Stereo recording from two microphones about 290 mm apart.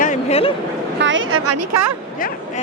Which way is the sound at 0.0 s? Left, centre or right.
Left.